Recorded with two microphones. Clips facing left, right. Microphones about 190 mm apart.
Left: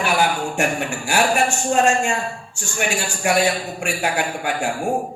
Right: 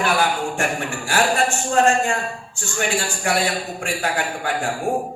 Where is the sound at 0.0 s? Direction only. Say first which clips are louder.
Even; 15° left (ahead or behind).